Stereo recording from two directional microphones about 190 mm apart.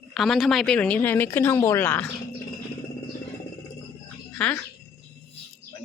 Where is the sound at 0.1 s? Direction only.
Centre (ahead or behind).